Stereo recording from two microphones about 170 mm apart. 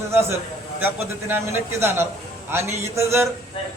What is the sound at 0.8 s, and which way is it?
A man's voice, 15° right (ahead or behind).